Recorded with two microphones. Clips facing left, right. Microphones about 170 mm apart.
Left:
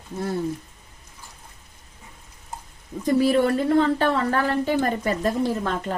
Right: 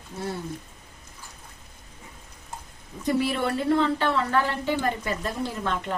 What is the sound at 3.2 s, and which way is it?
A woman's voice, 45° left (ahead or behind).